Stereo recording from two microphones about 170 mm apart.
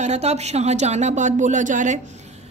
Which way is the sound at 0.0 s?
40° right (ahead or behind).